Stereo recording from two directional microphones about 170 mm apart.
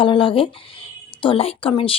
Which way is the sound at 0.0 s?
30° left (ahead or behind).